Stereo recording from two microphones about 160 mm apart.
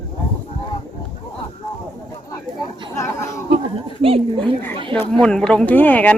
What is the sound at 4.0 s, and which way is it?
Speech, 35° right (ahead or behind).